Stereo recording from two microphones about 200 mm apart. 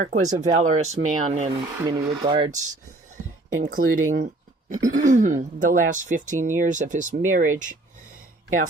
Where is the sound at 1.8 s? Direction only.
20° right (ahead or behind).